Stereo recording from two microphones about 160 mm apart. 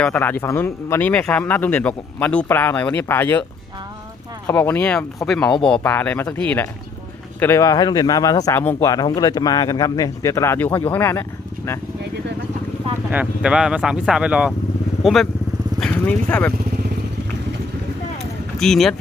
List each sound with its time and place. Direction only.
0.0 s speech: 10° left (ahead or behind)
4.4 s speech: 10° left (ahead or behind)
13.1 s speech: 5° right (ahead or behind); by 16.5 s 10° left (ahead or behind)
18.6 s speech: centre (ahead or behind)